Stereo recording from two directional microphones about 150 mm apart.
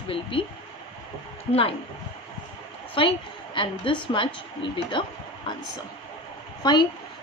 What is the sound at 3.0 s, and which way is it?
Speech, 35° left (ahead or behind).